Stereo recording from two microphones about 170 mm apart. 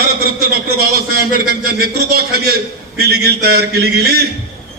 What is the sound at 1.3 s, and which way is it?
A man's voice, 65° right (ahead or behind).